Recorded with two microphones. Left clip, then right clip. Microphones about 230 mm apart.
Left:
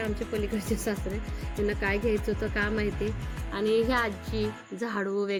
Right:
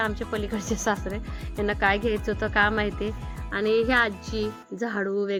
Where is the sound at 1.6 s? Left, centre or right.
Centre.